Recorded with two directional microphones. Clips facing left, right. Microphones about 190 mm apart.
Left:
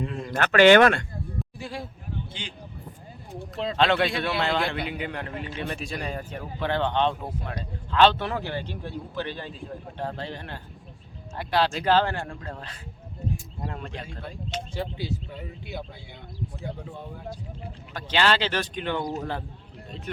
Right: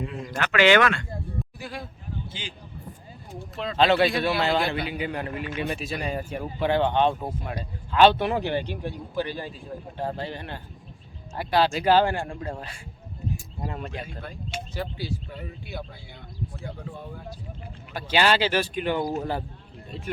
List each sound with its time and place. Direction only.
0.3 s speech: 50° left (ahead or behind)
1.5 s speech: 25° left (ahead or behind)
2.4 s a man's voice: 5° right (ahead or behind)
3.8 s a man's voice: 5° right (ahead or behind)
14.7 s speech: 20° left (ahead or behind)
17.9 s speech: 10° right (ahead or behind)